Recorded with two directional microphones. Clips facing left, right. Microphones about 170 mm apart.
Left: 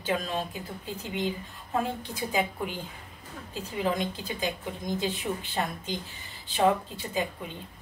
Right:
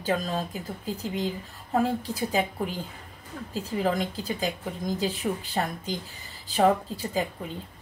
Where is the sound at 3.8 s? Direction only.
35° right (ahead or behind).